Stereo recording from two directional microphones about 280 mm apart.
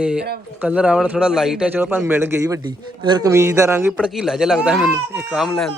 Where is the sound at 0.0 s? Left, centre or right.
Centre.